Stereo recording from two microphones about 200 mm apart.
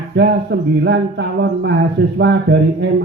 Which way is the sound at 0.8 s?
60° right (ahead or behind).